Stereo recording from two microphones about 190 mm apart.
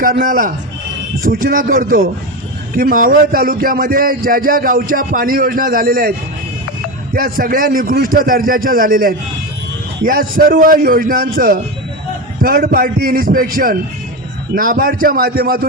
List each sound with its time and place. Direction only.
0.0 s a man's voice: 50° right (ahead or behind)